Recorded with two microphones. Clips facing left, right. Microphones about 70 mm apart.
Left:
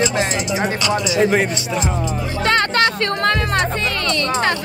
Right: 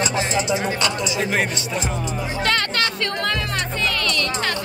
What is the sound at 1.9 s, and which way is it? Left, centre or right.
Speech, left.